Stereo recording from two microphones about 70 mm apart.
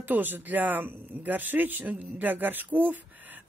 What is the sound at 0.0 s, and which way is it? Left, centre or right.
Speech, right.